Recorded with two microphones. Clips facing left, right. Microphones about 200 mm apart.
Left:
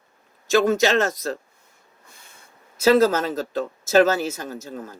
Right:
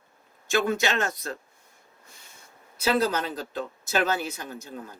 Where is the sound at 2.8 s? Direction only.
45° left (ahead or behind).